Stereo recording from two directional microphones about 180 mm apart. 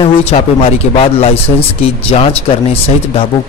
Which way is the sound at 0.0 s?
35° left (ahead or behind).